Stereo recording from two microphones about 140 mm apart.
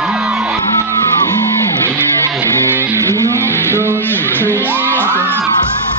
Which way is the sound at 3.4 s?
15° left (ahead or behind).